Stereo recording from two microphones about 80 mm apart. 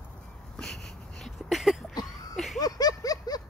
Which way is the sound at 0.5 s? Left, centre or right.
Centre.